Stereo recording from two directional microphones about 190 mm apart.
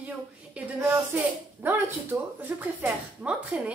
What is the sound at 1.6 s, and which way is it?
A woman's voice, 10° right (ahead or behind).